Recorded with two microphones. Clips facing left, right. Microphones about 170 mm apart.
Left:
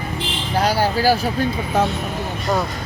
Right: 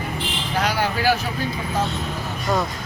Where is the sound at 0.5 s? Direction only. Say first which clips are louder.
Left 4 dB; 30° left (ahead or behind).